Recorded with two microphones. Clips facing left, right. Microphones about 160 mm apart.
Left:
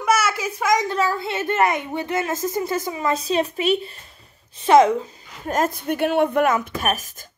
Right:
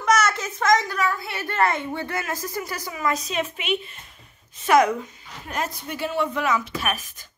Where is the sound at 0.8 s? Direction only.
25° left (ahead or behind); by 7.2 s 45° left (ahead or behind).